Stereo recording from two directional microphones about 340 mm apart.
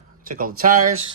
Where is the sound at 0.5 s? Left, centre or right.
Right.